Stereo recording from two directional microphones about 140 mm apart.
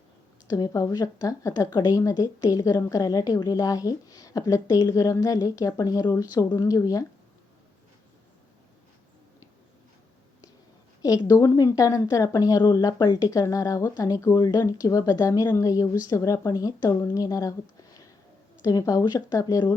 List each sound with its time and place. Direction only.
0.4 s a woman's voice: 25° left (ahead or behind)
11.0 s a woman's voice: 25° left (ahead or behind)